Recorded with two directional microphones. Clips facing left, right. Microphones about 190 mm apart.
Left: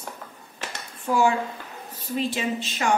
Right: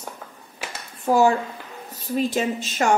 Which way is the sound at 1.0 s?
40° right (ahead or behind).